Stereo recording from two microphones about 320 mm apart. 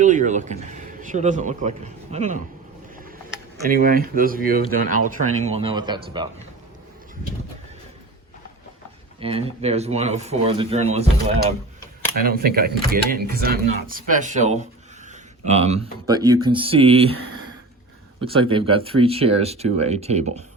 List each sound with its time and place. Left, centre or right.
0.0 s speech: right
3.7 s speech: right
9.2 s speech: centre